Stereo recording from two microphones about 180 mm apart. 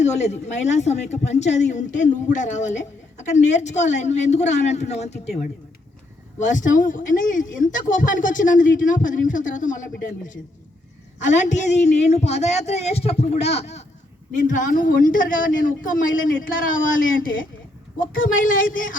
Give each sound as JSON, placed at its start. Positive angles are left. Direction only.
{"t": 0.0, "sound": "speech", "side_deg": 40}
{"t": 6.4, "sound": "speech", "side_deg": 45}
{"t": 11.2, "sound": "speech", "side_deg": 40}